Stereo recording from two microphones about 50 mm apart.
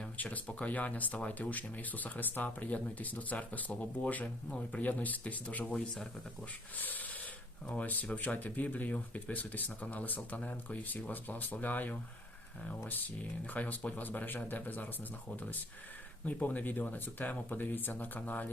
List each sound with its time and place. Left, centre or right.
0.2 s speech: left
5.7 s speech: centre
6.7 s snort: left
7.7 s speech: left
13.5 s speech: left
16.2 s speech: left